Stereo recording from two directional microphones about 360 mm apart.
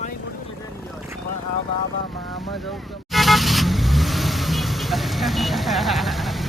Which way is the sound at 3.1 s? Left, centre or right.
Centre.